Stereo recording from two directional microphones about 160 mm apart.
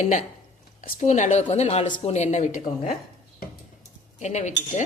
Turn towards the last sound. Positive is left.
turn(degrees=45)  # may be behind; listen again after turning